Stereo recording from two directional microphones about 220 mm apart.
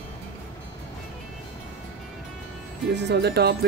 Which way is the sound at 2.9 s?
50° right (ahead or behind).